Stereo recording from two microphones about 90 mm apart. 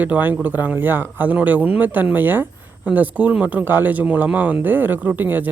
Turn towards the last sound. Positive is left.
turn(degrees=-20)  # may be behind; listen again after turning